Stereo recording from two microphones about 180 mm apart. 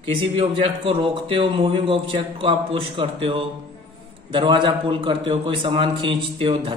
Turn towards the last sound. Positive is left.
turn(degrees=-30)  # may be behind; listen again after turning